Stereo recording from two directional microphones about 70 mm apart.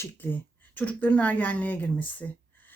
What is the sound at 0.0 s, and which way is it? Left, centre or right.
Speech, left.